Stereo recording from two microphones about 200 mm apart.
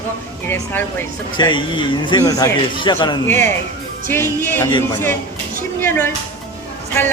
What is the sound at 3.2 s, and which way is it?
A woman's voice, 10° left (ahead or behind).